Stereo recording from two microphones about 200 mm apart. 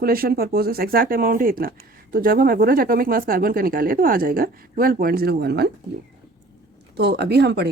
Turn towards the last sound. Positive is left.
turn(degrees=-55)  # may be behind; listen again after turning